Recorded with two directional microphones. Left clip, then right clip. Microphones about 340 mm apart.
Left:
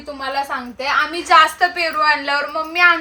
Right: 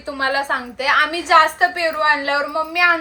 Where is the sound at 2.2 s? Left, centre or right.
Centre.